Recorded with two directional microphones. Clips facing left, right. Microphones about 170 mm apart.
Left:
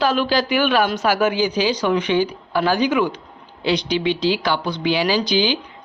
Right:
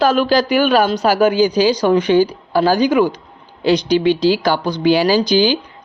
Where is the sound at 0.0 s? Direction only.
45° right (ahead or behind).